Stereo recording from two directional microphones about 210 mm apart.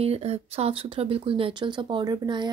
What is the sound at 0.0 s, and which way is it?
Speech, 30° right (ahead or behind).